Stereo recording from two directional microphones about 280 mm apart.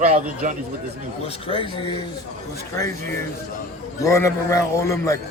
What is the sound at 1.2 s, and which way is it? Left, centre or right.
Speech, centre.